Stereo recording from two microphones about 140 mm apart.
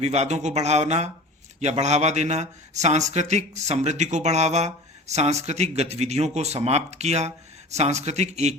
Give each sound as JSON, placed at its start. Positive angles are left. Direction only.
{"t": 0.0, "sound": "speech", "side_deg": -55}